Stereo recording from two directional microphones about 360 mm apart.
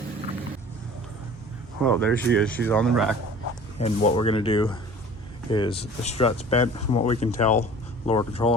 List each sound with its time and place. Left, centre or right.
1.8 s speech: centre
3.8 s speech: centre